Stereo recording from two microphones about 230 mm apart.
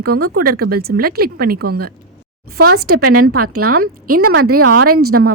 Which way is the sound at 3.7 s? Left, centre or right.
Right.